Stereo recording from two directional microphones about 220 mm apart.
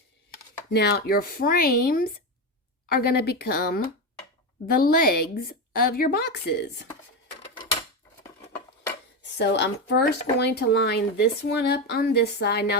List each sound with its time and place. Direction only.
0.7 s a woman's voice: 50° left (ahead or behind)
9.4 s speech: 50° left (ahead or behind)